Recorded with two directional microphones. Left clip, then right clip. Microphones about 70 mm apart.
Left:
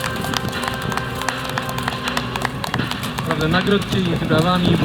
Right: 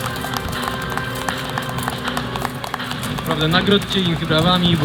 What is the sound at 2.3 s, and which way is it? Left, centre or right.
Music, left.